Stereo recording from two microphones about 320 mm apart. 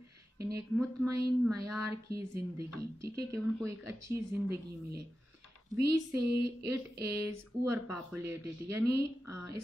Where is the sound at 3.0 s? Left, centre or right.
Centre.